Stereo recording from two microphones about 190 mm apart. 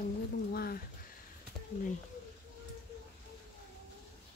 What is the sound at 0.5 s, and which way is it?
Speech, 55° left (ahead or behind).